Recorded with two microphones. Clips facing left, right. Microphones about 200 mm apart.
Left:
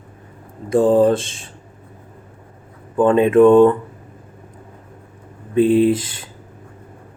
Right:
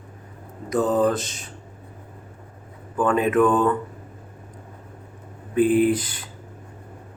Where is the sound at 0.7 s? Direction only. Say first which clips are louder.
Left 7 dB; 30° left (ahead or behind).